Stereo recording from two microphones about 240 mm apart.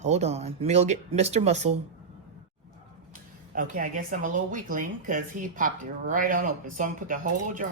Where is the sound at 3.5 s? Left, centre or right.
Right.